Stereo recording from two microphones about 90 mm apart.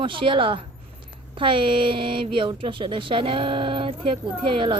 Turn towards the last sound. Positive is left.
turn(degrees=-70)  # may be behind; listen again after turning